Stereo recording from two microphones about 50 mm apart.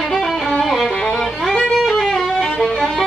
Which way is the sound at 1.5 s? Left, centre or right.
Centre.